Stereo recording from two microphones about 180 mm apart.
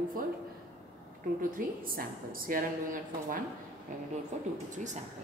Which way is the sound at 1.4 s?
50° right (ahead or behind).